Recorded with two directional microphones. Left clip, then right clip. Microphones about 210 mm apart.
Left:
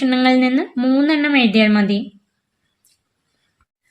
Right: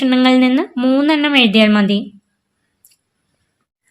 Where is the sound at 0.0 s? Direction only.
35° right (ahead or behind).